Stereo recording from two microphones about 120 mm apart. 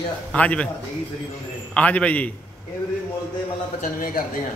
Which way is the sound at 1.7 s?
10° left (ahead or behind).